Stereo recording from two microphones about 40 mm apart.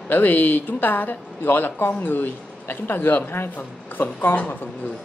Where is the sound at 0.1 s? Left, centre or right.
Left.